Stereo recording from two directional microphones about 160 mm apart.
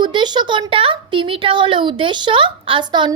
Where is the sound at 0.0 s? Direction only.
30° right (ahead or behind).